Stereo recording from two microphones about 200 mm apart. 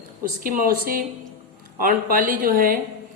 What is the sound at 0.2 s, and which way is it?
Speech, 45° right (ahead or behind).